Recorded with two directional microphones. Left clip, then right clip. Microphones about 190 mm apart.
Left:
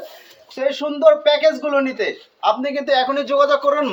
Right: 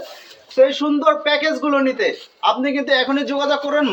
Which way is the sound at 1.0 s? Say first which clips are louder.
Left 5 dB; 15° left (ahead or behind).